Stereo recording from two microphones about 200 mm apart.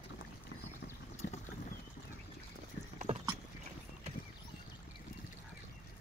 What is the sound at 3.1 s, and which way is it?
Rowboat, 35° right (ahead or behind).